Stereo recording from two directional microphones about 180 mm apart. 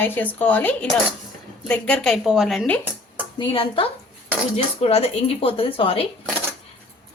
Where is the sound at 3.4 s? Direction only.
30° left (ahead or behind).